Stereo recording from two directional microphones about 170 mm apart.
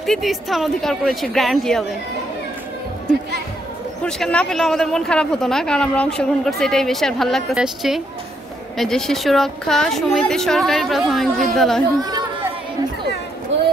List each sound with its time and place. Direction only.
0.0 s a woman's voice: centre (ahead or behind)
4.0 s a woman's voice: 5° left (ahead or behind)
12.0 s speech: 25° right (ahead or behind)
13.5 s a sound: 90° right